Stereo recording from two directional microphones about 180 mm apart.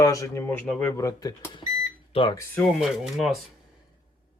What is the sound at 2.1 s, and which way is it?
Speech, 30° left (ahead or behind).